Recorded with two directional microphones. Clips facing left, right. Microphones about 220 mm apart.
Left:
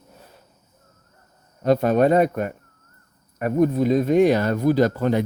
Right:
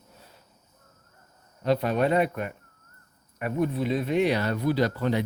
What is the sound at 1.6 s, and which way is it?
Speech, 45° left (ahead or behind).